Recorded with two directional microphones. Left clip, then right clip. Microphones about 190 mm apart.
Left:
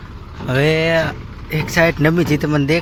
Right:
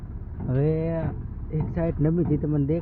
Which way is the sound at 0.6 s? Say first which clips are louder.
Left 12 dB; 10° left (ahead or behind).